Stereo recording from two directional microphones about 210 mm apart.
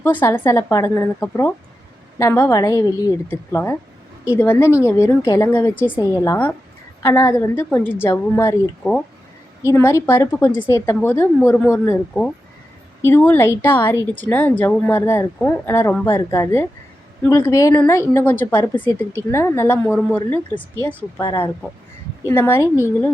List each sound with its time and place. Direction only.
0.0 s a woman's voice: 10° left (ahead or behind)